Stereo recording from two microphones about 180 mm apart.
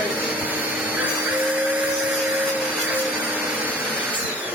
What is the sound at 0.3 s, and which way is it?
Vacuum cleaner, 10° right (ahead or behind).